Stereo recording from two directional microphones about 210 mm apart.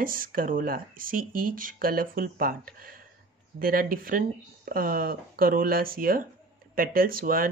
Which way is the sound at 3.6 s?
45° right (ahead or behind).